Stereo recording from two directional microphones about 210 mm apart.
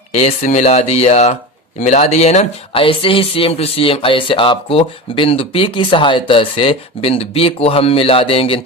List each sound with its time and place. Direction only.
0.1 s speech: 30° left (ahead or behind)